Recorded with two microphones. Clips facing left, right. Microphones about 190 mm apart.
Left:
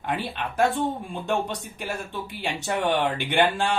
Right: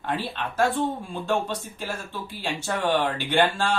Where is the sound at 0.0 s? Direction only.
15° left (ahead or behind).